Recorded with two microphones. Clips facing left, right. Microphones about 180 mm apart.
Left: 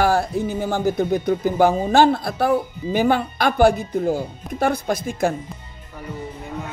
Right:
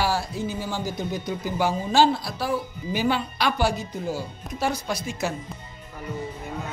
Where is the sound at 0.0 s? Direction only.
55° left (ahead or behind).